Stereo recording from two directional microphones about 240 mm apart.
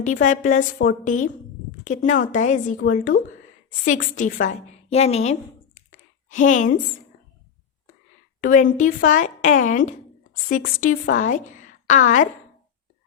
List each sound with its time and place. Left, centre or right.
0.0 s a woman's voice: left
8.4 s a woman's voice: left